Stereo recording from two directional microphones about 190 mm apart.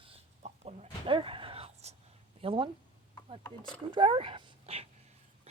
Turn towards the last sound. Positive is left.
turn(degrees=-30)  # may be behind; listen again after turning